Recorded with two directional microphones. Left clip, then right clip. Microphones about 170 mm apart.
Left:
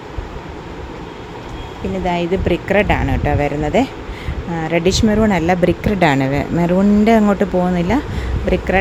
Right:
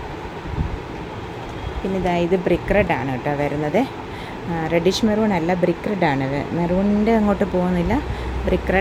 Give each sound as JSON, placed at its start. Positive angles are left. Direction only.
{"t": 2.0, "sound": "speech", "side_deg": 10}